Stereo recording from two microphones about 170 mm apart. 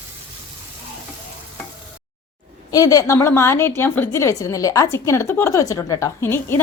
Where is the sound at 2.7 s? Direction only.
20° left (ahead or behind).